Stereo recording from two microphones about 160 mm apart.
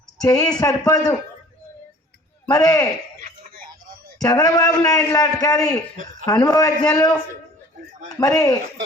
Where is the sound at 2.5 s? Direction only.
20° left (ahead or behind).